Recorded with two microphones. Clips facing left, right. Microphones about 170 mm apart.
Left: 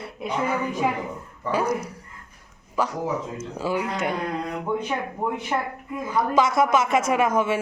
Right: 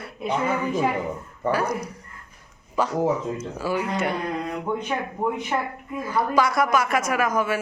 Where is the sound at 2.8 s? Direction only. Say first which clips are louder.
Right 1 dB; 5° left (ahead or behind).